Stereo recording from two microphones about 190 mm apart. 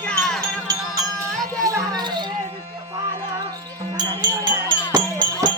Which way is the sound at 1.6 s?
20° right (ahead or behind).